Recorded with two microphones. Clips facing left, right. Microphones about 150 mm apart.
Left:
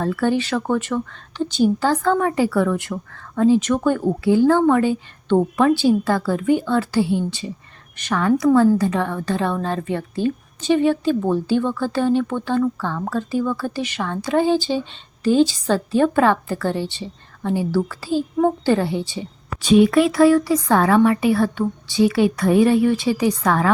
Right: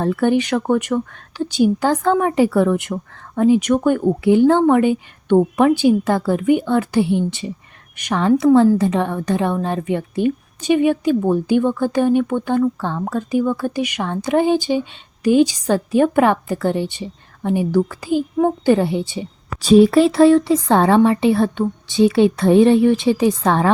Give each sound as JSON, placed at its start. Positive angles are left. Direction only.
{"t": 0.0, "sound": "a woman's voice", "side_deg": -20}
{"t": 19.6, "sound": "speech", "side_deg": -35}